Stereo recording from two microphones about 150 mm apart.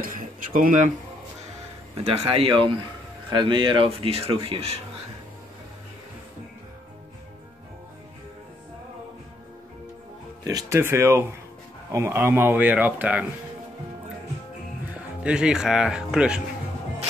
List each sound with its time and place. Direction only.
0.0 s speech: 65° right (ahead or behind)
2.0 s speech: 40° right (ahead or behind)
10.4 s speech: 20° right (ahead or behind)
15.2 s speech: 5° right (ahead or behind)